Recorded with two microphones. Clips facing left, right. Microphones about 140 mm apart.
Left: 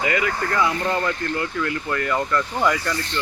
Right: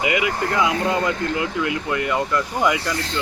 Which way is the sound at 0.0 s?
15° right (ahead or behind).